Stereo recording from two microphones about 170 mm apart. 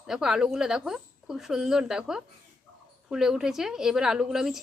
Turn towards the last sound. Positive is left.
turn(degrees=0)  # may be behind; listen again after turning